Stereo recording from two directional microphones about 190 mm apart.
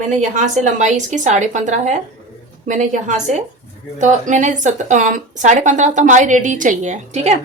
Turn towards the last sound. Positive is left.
turn(degrees=-35)  # may be behind; listen again after turning